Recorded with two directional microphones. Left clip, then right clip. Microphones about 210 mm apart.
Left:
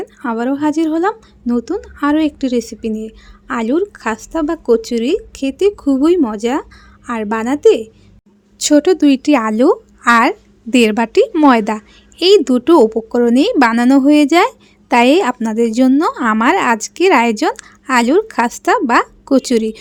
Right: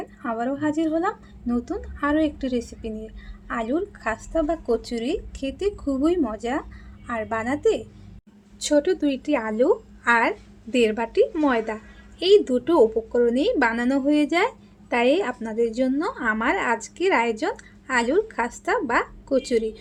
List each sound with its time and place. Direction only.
0.0 s speech: 50° left (ahead or behind)